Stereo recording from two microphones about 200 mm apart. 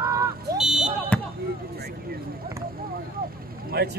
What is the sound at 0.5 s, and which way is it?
Smoke detector, centre (ahead or behind).